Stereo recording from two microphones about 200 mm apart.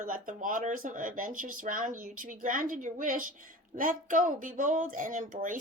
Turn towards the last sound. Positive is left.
turn(degrees=-40)  # may be behind; listen again after turning